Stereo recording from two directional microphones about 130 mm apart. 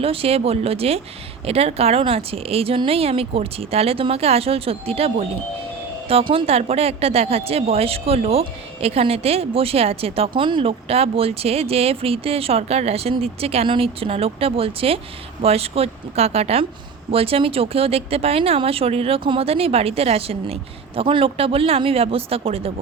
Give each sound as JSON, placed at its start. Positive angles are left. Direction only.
{"t": 0.0, "sound": "speech", "side_deg": -45}
{"t": 6.3, "sound": "speech", "side_deg": -50}